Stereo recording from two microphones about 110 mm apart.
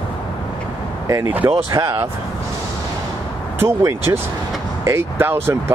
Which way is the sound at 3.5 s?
25° right (ahead or behind).